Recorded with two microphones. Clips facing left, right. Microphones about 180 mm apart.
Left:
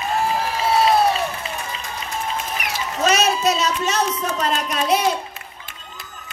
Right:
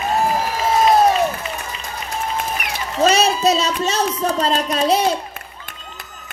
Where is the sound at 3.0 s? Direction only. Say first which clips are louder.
Right 3 dB; 30° right (ahead or behind).